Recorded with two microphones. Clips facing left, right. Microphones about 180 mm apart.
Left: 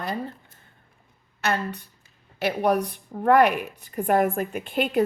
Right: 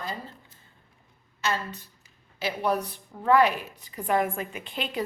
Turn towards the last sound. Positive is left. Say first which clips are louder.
# left 9 dB
turn(degrees=55)  # may be behind; listen again after turning